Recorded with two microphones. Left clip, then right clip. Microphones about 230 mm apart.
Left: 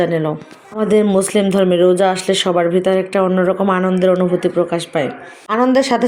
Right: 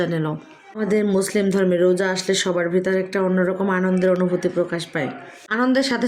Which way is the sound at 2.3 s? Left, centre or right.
Left.